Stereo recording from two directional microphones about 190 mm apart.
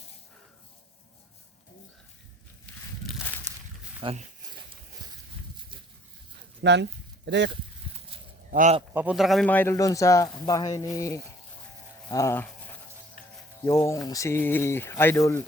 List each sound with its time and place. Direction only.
2.7 s a sound: 5° left (ahead or behind)
4.0 s a sound: 30° right (ahead or behind)
6.6 s speech: 65° right (ahead or behind)
8.5 s speech: 40° right (ahead or behind)
8.9 s speech: 10° right (ahead or behind); by 12.5 s 15° left (ahead or behind)
13.7 s speech: 15° left (ahead or behind)